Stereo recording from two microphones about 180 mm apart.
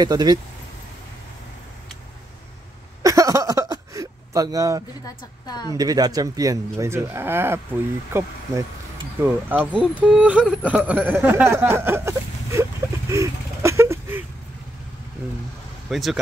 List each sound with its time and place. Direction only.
0.0 s speech: 20° right (ahead or behind)
3.0 s a sound: 20° right (ahead or behind)
5.0 s a woman's voice: 20° left (ahead or behind)
5.8 s speech: 20° right (ahead or behind)
13.1 s a sound: 15° right (ahead or behind)
15.9 s speech: centre (ahead or behind)